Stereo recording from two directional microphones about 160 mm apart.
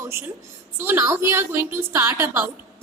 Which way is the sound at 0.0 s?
15° right (ahead or behind).